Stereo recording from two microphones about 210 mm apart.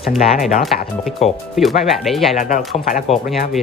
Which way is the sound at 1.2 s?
30° left (ahead or behind).